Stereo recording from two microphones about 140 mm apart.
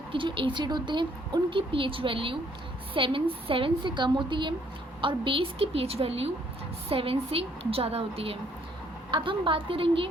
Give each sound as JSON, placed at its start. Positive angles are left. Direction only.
{"t": 0.1, "sound": "a woman's voice", "side_deg": -40}